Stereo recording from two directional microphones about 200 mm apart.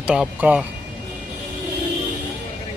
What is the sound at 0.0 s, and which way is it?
Speech, 5° right (ahead or behind).